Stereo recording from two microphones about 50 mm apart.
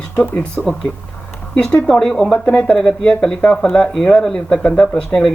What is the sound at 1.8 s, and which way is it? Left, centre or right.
Speech, centre.